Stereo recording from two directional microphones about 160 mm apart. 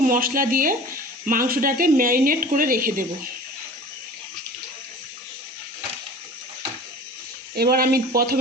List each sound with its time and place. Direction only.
0.0 s speech: 60° right (ahead or behind)
7.5 s speech: 75° right (ahead or behind)